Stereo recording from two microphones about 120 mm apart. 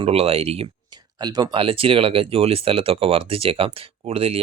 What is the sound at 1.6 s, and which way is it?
Speech, 50° right (ahead or behind).